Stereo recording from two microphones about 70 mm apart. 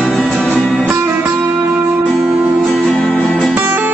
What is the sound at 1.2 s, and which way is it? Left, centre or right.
Music, right.